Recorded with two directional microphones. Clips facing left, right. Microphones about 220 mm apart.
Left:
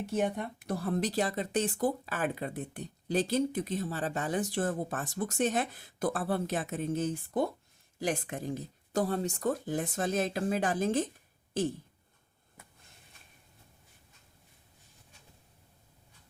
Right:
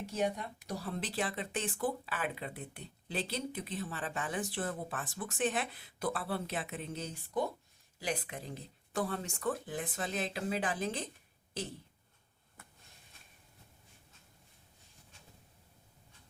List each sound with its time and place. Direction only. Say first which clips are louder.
0.1 s speech: left 3 dB; 55° left (ahead or behind)